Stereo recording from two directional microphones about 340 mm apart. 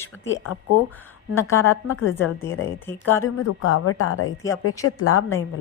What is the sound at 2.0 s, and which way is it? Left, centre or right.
Speech, left.